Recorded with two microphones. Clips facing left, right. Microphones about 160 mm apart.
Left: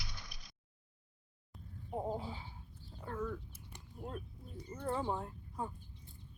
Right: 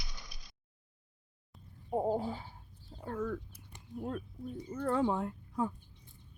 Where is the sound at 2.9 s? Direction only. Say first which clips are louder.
Right 4 dB; 35° right (ahead or behind).